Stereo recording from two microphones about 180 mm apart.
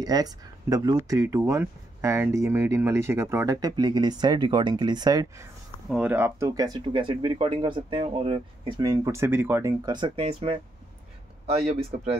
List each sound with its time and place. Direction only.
0.0 s speech: 20° right (ahead or behind)
5.9 s speech: 5° right (ahead or behind); by 12.1 s 35° right (ahead or behind)